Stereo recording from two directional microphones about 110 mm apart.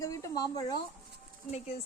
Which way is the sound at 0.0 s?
30° left (ahead or behind).